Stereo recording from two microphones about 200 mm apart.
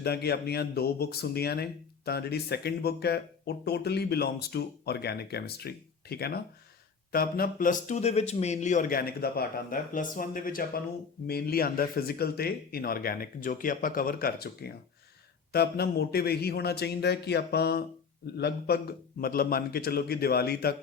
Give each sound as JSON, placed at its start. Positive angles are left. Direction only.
{"t": 0.0, "sound": "speech", "side_deg": 55}